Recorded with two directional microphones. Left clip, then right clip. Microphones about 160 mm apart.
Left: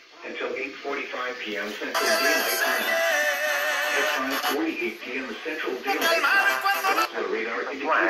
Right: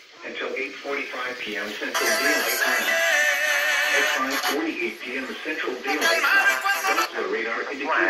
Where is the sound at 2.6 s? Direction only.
30° left (ahead or behind).